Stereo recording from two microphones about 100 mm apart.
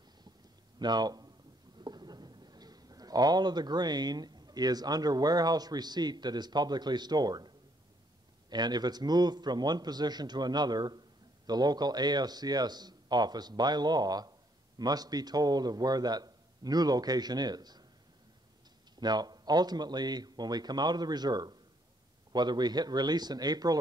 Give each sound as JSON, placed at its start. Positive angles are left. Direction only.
{"t": 0.7, "sound": "a man's voice", "side_deg": -45}
{"t": 18.9, "sound": "a man's voice", "side_deg": -45}